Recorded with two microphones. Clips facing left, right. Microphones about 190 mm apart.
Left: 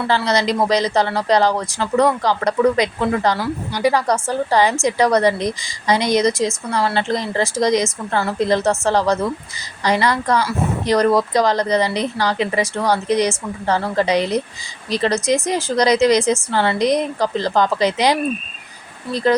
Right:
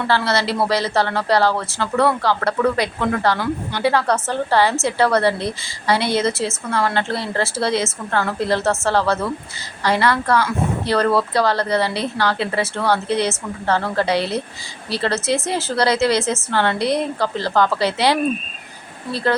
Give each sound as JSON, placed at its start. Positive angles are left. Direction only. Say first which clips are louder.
{"t": 0.1, "sound": "speech", "louder": "left 2 dB", "side_deg": 15}